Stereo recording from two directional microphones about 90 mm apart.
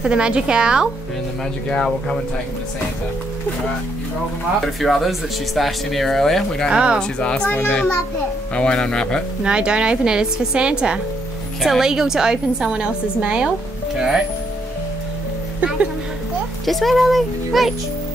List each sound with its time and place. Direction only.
0.0 s a woman's voice: 10° right (ahead or behind)
1.7 s speech: 10° left (ahead or behind)
4.7 s speech: centre (ahead or behind)
6.7 s a woman's voice: 10° right (ahead or behind)
7.0 s speech: 10° left (ahead or behind)
9.4 s a woman's voice: 10° right (ahead or behind)
16.6 s speech: centre (ahead or behind)